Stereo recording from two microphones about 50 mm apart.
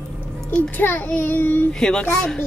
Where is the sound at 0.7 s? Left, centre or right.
Left.